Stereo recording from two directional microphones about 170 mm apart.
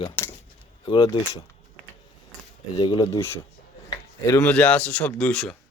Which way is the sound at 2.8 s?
30° left (ahead or behind).